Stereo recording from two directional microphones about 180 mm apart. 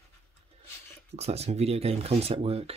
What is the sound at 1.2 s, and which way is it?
Speech, 35° right (ahead or behind).